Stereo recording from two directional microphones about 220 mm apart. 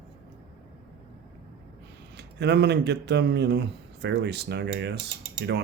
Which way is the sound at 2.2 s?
50° right (ahead or behind).